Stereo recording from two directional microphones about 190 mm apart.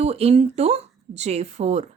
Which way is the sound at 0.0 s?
35° right (ahead or behind).